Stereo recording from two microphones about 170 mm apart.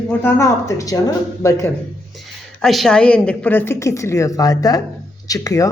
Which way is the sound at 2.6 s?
Centre (ahead or behind).